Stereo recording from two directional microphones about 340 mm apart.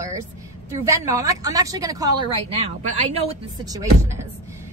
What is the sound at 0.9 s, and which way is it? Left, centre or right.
A woman's voice, centre.